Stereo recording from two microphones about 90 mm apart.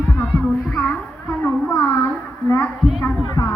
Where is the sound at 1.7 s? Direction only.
30° left (ahead or behind).